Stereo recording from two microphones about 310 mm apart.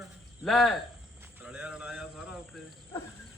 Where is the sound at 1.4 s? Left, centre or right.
Centre.